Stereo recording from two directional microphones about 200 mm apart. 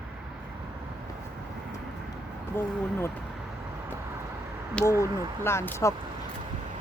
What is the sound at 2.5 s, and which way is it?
Speech, 10° left (ahead or behind).